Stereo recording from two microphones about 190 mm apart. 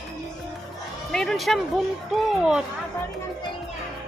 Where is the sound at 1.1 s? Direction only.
Centre (ahead or behind).